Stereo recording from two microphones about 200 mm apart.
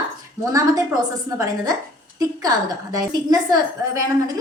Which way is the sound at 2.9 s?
20° right (ahead or behind).